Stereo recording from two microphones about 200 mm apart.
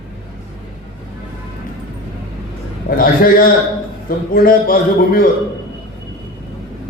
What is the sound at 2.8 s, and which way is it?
A man's voice, 45° left (ahead or behind).